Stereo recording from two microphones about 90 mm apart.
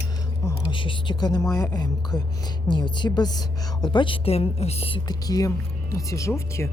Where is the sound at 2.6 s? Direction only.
55° left (ahead or behind); by 5.0 s 90° left.